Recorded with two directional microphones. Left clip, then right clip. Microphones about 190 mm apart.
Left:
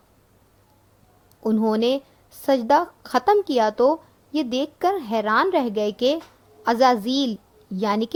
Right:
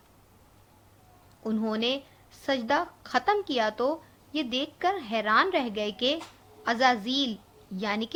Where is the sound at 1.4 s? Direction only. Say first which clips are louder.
Left 8 dB; 50° left (ahead or behind).